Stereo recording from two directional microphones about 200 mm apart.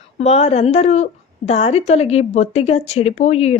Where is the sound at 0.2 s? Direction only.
30° left (ahead or behind).